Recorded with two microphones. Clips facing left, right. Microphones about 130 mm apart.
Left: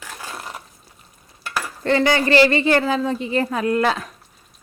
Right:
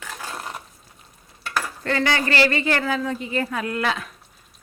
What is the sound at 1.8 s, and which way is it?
A woman's voice, 25° left (ahead or behind).